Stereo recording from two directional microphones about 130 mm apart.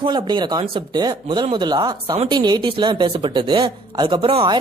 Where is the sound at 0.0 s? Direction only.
35° right (ahead or behind).